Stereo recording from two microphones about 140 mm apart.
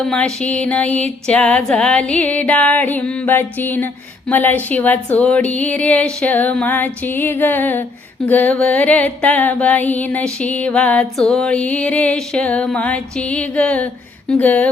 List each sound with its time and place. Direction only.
0.0 s music: 5° left (ahead or behind)